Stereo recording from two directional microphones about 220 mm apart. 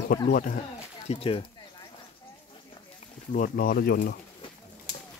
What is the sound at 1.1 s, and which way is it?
Speech, 25° left (ahead or behind).